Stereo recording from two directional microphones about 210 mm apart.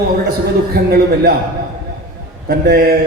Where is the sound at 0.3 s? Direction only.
50° right (ahead or behind).